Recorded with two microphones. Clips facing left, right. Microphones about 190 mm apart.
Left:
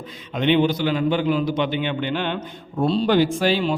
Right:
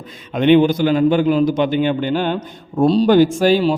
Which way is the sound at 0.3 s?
50° right (ahead or behind).